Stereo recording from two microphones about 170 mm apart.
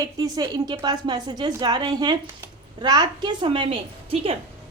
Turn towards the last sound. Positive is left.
turn(degrees=-35)  # may be behind; listen again after turning